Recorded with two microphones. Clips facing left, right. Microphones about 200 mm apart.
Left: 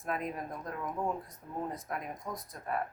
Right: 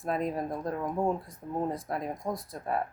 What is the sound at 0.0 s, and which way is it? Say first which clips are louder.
A woman's voice: right 6 dB; 35° right (ahead or behind).